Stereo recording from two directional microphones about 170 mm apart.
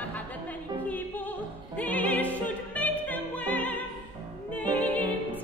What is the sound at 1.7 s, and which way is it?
Opera, 10° left (ahead or behind).